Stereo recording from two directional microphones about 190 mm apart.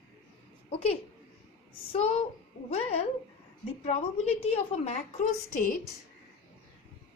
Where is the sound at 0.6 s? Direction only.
30° left (ahead or behind).